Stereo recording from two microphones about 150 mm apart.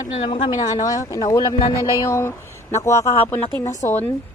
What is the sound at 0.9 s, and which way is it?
A man's voice, 25° left (ahead or behind).